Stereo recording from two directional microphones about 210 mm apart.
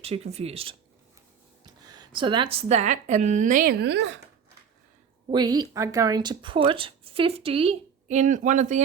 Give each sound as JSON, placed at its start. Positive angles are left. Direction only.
{"t": 0.0, "sound": "speech", "side_deg": -30}
{"t": 5.3, "sound": "speech", "side_deg": -20}